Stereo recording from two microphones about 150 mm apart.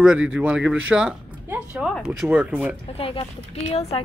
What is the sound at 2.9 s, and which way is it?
Speech, 40° left (ahead or behind).